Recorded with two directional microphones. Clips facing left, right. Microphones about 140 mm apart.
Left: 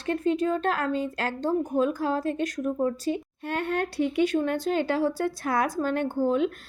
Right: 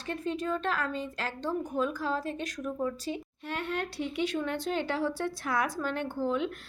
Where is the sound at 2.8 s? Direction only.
50° left (ahead or behind).